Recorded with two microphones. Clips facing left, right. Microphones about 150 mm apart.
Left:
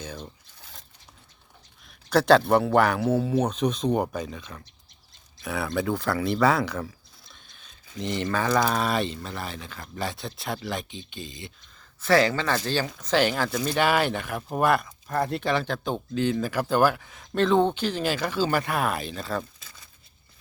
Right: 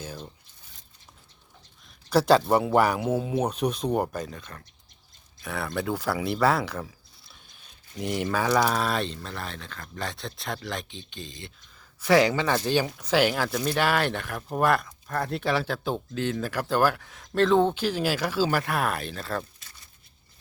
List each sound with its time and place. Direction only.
0.0 s speech: 5° right (ahead or behind)
0.6 s a sound: 80° left
2.0 s speech: 5° right (ahead or behind)
7.9 s speech: 10° right (ahead or behind)
11.8 s speech: 15° right (ahead or behind)